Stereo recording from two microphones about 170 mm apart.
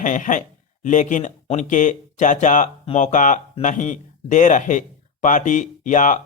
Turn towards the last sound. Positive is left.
turn(degrees=50)  # may be behind; listen again after turning